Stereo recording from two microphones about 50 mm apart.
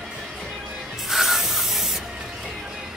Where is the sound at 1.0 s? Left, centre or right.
Centre.